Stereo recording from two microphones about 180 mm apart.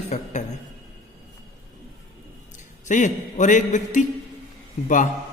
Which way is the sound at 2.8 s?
45° left (ahead or behind).